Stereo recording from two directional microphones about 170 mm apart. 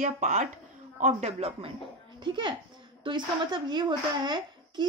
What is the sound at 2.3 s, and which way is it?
A child's voice, 25° right (ahead or behind).